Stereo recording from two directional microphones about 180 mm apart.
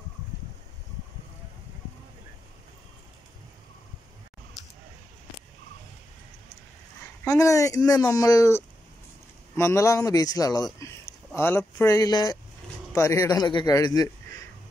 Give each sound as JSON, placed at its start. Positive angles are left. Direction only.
{"t": 7.2, "sound": "speech", "side_deg": 15}